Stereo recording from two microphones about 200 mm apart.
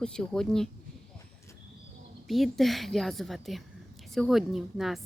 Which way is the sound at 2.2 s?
Centre (ahead or behind).